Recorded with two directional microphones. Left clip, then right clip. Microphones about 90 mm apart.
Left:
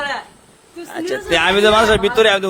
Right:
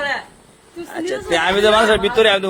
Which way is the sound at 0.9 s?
70° left (ahead or behind).